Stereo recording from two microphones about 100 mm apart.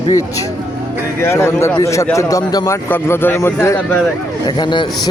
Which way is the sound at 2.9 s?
20° left (ahead or behind).